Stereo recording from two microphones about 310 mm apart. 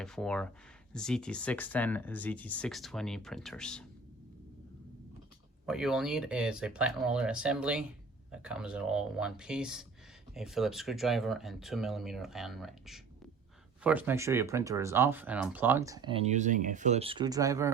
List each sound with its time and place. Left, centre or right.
0.0 s speech: centre
5.6 s speech: centre